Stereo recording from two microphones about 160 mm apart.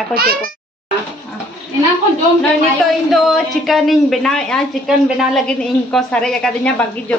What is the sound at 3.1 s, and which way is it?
A woman's voice, centre (ahead or behind).